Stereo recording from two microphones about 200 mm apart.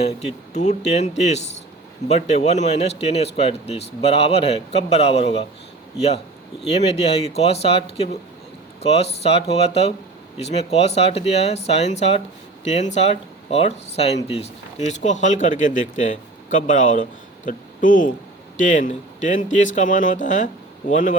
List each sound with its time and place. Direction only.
0.5 s speech: 35° left (ahead or behind)
6.7 s speech: 30° left (ahead or behind)